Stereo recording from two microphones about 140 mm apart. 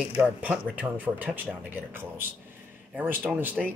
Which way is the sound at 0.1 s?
10° right (ahead or behind).